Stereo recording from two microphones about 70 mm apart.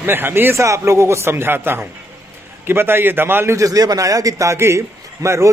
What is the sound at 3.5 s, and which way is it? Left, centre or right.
A man's voice, right.